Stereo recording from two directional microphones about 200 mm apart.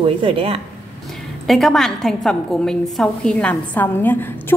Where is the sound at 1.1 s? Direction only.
Centre (ahead or behind).